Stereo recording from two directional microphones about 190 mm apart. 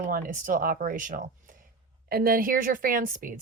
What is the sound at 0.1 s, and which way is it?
A woman's voice, 45° right (ahead or behind).